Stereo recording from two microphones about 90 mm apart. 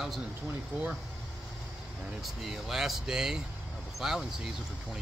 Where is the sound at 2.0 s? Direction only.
5° right (ahead or behind).